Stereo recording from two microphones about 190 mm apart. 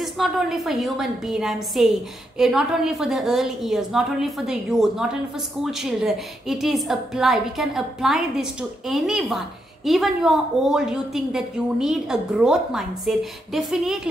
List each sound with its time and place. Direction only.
0.0 s a woman's voice: centre (ahead or behind)